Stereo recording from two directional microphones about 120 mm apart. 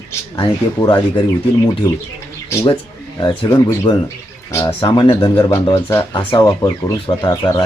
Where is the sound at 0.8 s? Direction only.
40° left (ahead or behind).